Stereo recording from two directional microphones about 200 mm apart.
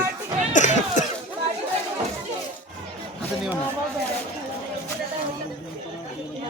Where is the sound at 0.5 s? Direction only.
35° left (ahead or behind).